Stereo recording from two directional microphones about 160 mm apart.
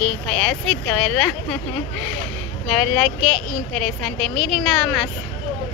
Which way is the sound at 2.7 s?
5° left (ahead or behind).